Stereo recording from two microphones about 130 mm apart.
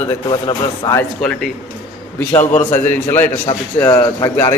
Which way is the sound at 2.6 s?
15° left (ahead or behind).